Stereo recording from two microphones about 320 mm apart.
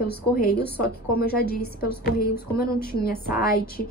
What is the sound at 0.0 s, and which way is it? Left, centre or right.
A woman's voice, left.